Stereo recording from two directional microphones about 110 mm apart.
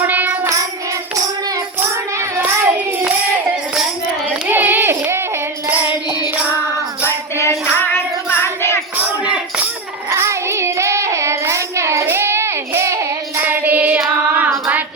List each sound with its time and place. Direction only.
0.1 s music: 15° right (ahead or behind)
2.4 s child singing: 15° right (ahead or behind)
4.4 s a sound: 15° right (ahead or behind)
7.0 s music: 25° left (ahead or behind)
9.0 s a sound: 10° right (ahead or behind)
10.1 s child singing: 25° right (ahead or behind)